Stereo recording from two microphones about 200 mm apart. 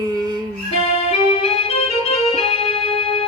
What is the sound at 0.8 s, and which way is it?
Music, 30° left (ahead or behind).